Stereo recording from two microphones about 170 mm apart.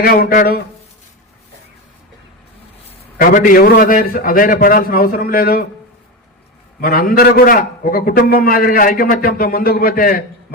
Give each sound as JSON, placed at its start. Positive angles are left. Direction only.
{"t": 0.0, "sound": "a man's voice", "side_deg": 60}
{"t": 3.2, "sound": "a man's voice", "side_deg": 55}
{"t": 6.8, "sound": "a man's voice", "side_deg": 60}